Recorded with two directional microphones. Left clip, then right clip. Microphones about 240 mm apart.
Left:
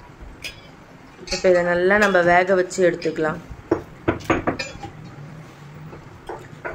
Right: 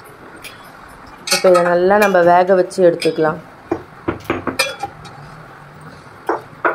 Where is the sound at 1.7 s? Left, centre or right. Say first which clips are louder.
Right 5 dB; centre.